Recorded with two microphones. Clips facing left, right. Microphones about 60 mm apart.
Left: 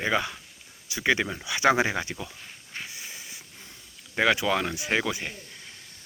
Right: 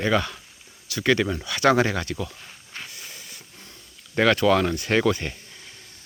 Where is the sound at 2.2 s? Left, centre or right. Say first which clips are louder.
Right 1 dB; centre.